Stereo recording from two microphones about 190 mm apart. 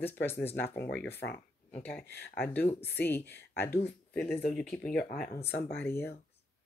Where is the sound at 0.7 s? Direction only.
60° left (ahead or behind).